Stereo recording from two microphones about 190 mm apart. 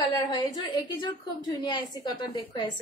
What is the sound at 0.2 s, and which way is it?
A woman's voice, 20° left (ahead or behind).